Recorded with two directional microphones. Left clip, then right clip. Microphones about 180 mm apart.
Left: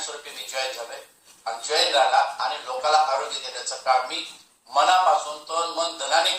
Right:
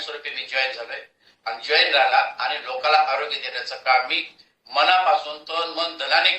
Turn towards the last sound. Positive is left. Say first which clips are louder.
# right 2 dB
turn(degrees=-40)  # may be behind; listen again after turning